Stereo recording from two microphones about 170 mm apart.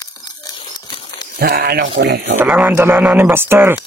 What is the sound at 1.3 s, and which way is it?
Speech, 60° right (ahead or behind).